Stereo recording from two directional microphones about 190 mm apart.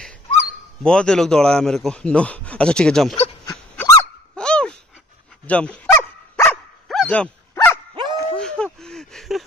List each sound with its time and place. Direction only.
0.8 s a man's voice: 5° left (ahead or behind)
3.4 s dog: 15° left (ahead or behind)
4.4 s dog: 5° left (ahead or behind)
7.9 s honk: 25° right (ahead or behind)
8.4 s a sound: 5° left (ahead or behind)